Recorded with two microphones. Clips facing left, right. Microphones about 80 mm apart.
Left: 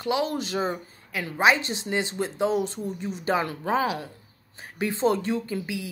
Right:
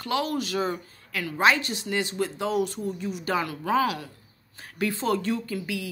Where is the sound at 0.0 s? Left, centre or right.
Left.